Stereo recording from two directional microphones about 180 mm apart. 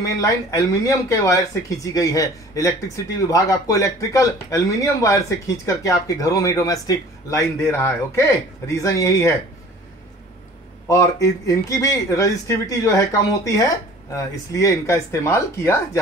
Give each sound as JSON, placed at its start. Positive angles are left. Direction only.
{"t": 0.0, "sound": "a man's voice", "side_deg": 15}
{"t": 10.9, "sound": "a man's voice", "side_deg": 15}